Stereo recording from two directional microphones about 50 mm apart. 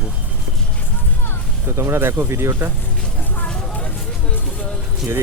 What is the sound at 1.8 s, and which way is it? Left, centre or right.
Speech, right.